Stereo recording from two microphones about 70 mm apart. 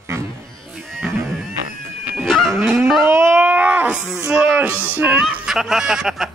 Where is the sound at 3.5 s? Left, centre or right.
Right.